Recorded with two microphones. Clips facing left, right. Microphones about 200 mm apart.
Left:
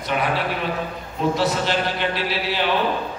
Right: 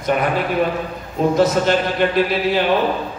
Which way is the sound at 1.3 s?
50° right (ahead or behind).